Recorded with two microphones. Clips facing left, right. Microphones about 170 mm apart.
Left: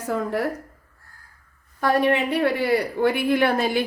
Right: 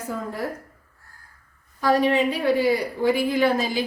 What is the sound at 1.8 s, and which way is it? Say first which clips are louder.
A woman's voice: right 1 dB; 60° left (ahead or behind).